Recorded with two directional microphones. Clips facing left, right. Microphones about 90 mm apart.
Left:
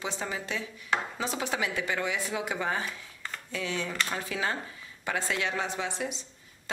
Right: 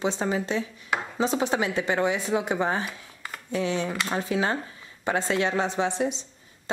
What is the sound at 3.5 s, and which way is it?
Speech, 25° right (ahead or behind).